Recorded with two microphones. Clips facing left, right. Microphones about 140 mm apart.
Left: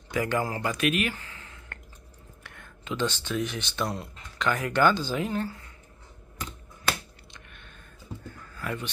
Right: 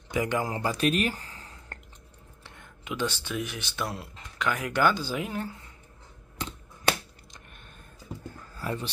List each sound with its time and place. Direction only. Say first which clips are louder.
0.1 s speech: even; 20° right (ahead or behind)
0.6 s speech: right 1 dB; 35° right (ahead or behind)
2.4 s speech: left 1 dB; 20° right (ahead or behind)
7.2 s a sound: left 1 dB; 40° right (ahead or behind)
8.5 s a man's voice: right 1 dB; 35° right (ahead or behind)